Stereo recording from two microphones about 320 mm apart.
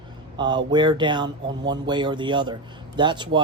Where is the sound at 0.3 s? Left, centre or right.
Centre.